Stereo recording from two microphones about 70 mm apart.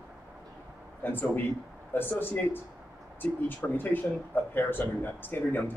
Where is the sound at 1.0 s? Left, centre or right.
Left.